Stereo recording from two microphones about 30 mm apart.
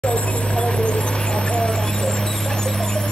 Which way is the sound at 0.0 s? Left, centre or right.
Left.